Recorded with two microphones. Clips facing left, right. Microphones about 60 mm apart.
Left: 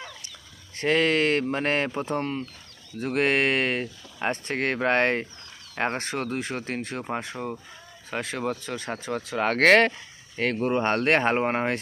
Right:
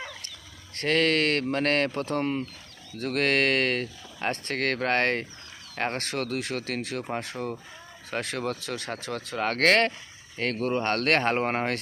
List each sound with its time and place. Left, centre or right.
0.8 s speech: centre
2.2 s speech: centre
3.0 s speech: centre
9.4 s speech: left